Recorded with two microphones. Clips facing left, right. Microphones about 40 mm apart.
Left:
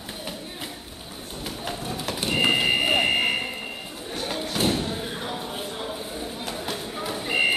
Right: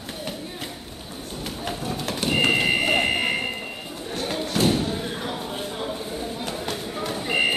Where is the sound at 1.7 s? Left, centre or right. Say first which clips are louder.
Right 2 dB; centre.